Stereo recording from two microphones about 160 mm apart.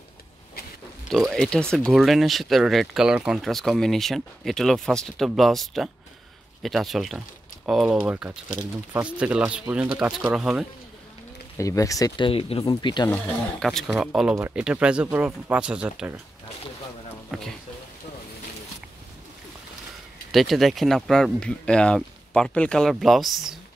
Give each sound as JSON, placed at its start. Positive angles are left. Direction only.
{"t": 1.1, "sound": "speech", "side_deg": 0}
{"t": 11.5, "sound": "speech", "side_deg": 20}
{"t": 12.3, "sound": "speech", "side_deg": 35}
{"t": 13.1, "sound": "speech", "side_deg": 5}
{"t": 17.3, "sound": "speech", "side_deg": 5}
{"t": 20.2, "sound": "speech", "side_deg": 0}